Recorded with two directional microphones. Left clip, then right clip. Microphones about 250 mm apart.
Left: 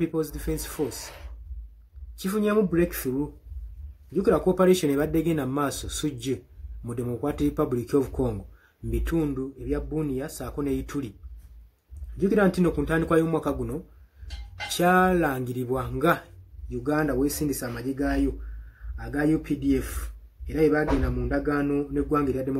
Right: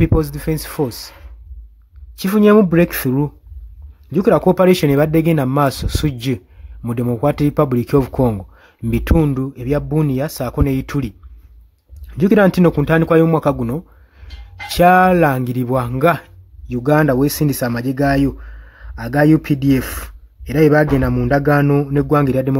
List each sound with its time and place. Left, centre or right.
0.0 s a man's voice: right
2.1 s a man's voice: right
12.2 s a man's voice: right
14.8 s a man's voice: right